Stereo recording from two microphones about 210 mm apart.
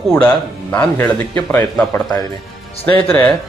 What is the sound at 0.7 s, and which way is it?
A man's voice, 10° left (ahead or behind).